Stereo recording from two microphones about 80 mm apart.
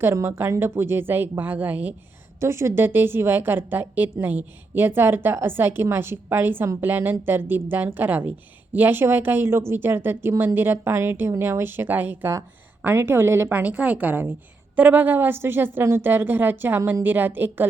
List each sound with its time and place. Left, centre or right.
0.0 s a woman's voice: right
2.4 s a woman's voice: right
13.5 s a woman's voice: centre